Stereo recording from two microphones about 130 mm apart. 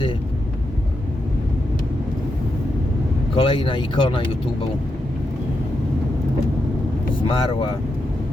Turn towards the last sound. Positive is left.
turn(degrees=40)  # may be behind; listen again after turning